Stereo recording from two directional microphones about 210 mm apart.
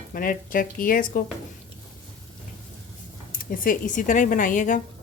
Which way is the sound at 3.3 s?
40° left (ahead or behind).